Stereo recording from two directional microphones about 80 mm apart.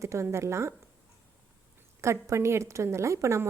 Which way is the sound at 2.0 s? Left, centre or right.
Right.